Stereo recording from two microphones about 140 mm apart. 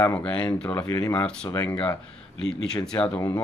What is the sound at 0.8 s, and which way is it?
Speech, 25° left (ahead or behind).